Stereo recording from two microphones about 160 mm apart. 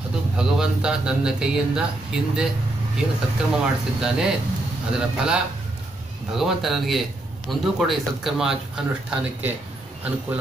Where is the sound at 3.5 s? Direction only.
5° right (ahead or behind).